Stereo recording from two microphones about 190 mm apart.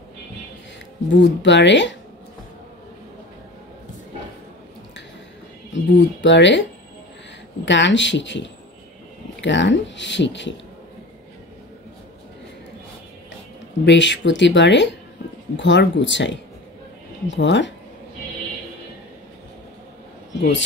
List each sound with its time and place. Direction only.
1.4 s speech: 70° left (ahead or behind)
5.7 s speech: 70° left (ahead or behind)
7.6 s speech: 70° left (ahead or behind)
13.8 s speech: 70° left (ahead or behind)
20.3 s a man's voice: 70° left (ahead or behind)